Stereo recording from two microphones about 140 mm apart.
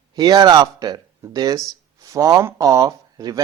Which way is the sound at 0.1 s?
30° right (ahead or behind).